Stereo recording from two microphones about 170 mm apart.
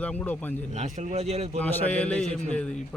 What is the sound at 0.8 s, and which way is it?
Speech, 40° right (ahead or behind).